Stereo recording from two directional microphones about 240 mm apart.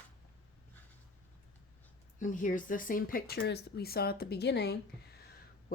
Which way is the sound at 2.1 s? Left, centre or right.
Left.